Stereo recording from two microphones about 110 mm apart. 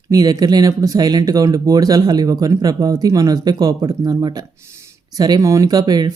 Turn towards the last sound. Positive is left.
turn(degrees=-40)  # may be behind; listen again after turning